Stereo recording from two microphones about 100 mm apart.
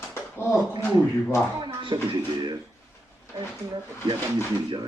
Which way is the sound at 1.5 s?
50° right (ahead or behind).